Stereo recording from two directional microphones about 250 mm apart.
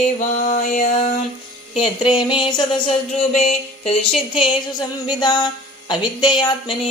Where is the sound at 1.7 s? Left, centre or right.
Left.